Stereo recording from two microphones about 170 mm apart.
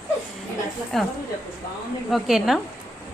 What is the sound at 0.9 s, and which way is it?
A woman's voice, centre (ahead or behind).